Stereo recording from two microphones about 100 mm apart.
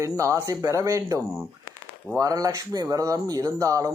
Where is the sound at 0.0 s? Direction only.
30° right (ahead or behind).